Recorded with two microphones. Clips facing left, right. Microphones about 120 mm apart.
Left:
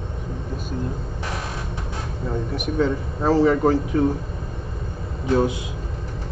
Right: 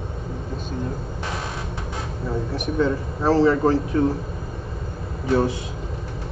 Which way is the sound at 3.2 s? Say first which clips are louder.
Even; 15° left (ahead or behind).